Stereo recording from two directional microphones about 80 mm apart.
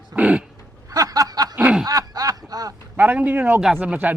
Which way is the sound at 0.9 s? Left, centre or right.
Right.